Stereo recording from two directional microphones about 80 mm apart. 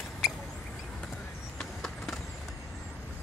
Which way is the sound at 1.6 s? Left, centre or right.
Centre.